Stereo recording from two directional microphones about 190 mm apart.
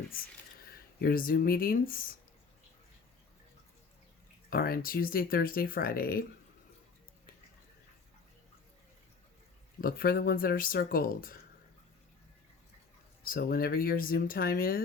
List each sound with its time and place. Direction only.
0.6 s speech: 50° left (ahead or behind)
4.4 s speech: 50° left (ahead or behind)
9.8 s speech: 50° left (ahead or behind)
13.2 s speech: 50° left (ahead or behind)